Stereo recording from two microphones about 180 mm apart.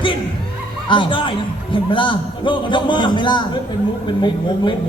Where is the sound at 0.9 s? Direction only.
30° left (ahead or behind).